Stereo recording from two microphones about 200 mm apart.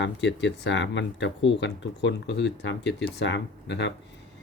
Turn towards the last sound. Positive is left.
turn(degrees=65)  # may be behind; listen again after turning